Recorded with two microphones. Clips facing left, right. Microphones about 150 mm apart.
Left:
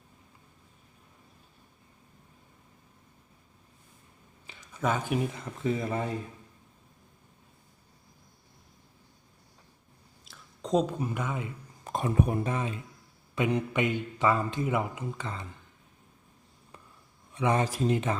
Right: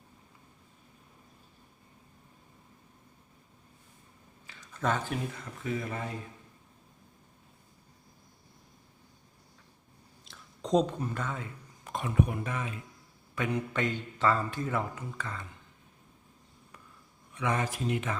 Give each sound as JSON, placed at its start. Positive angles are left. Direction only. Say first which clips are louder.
{"t": 4.4, "sound": "a sound", "louder": "left 1 dB", "side_deg": 10}
{"t": 5.6, "sound": "speech", "louder": "left 5 dB", "side_deg": 30}
{"t": 10.2, "sound": "speech", "louder": "right 1 dB", "side_deg": 0}
{"t": 11.9, "sound": "a man's voice", "louder": "left 2 dB", "side_deg": 35}
{"t": 17.3, "sound": "speech", "louder": "left 4 dB", "side_deg": 30}